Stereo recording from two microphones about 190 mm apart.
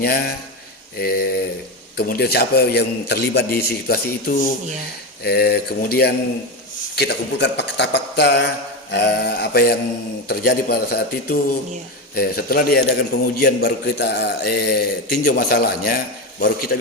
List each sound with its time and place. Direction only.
0.0 s a man's voice: 55° left (ahead or behind)
5.2 s a man's voice: 55° left (ahead or behind)